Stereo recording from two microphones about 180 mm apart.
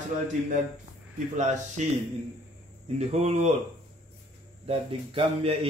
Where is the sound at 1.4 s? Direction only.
40° right (ahead or behind).